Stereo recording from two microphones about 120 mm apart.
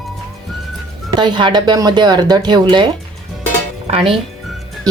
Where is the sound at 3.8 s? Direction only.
55° right (ahead or behind).